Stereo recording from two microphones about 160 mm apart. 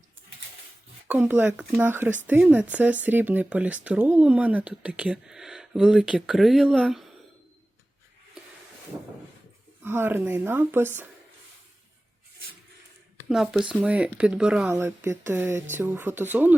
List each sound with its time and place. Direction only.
1.0 s speech: 10° right (ahead or behind)
9.8 s speech: 15° right (ahead or behind)
13.2 s speech: centre (ahead or behind)
14.8 s speech: 15° right (ahead or behind)